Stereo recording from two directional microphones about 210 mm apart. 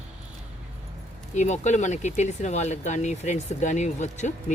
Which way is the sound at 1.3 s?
35° left (ahead or behind).